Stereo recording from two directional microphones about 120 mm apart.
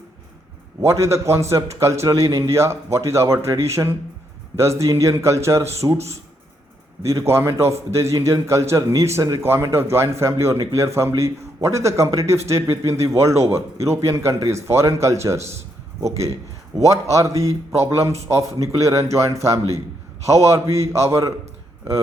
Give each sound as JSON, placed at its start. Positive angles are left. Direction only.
{"t": 0.8, "sound": "a man's voice", "side_deg": -25}
{"t": 7.0, "sound": "a man's voice", "side_deg": -25}